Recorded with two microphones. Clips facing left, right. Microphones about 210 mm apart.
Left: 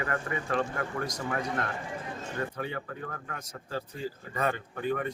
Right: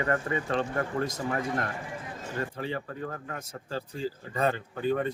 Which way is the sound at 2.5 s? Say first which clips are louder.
Right 2 dB; 30° right (ahead or behind).